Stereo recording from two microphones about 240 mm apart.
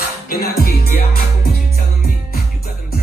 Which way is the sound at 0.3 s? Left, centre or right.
Left.